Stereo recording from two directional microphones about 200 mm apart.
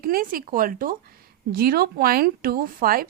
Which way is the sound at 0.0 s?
45° right (ahead or behind).